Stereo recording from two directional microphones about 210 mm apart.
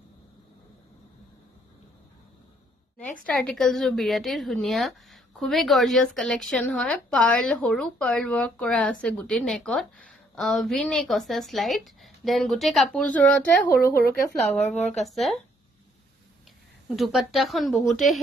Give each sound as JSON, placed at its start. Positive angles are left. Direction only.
{"t": 3.3, "sound": "a woman's voice", "side_deg": 5}
{"t": 13.7, "sound": "speech", "side_deg": 45}
{"t": 14.7, "sound": "speech", "side_deg": 35}
{"t": 15.0, "sound": "a woman's voice", "side_deg": 0}
{"t": 16.9, "sound": "a woman's voice", "side_deg": 0}